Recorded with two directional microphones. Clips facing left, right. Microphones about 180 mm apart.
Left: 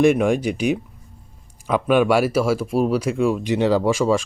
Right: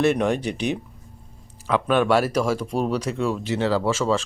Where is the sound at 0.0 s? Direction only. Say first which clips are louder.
Left 4 dB; 10° left (ahead or behind).